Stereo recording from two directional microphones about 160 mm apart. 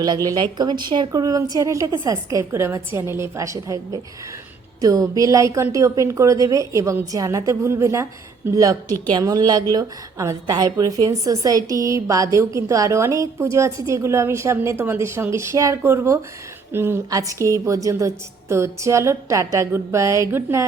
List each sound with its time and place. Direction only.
0.0 s a woman's voice: 25° right (ahead or behind)